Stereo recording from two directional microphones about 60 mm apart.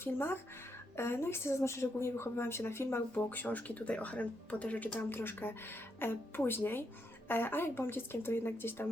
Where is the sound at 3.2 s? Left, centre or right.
Left.